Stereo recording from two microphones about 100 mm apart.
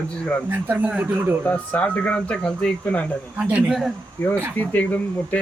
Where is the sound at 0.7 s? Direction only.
15° right (ahead or behind).